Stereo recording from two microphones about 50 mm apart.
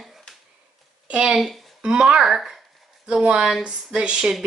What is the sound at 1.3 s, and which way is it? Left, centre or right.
Speech, centre.